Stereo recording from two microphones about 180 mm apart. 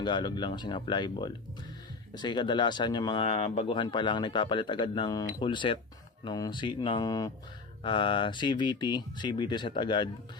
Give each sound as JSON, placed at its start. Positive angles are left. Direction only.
{"t": 0.0, "sound": "speech", "side_deg": 25}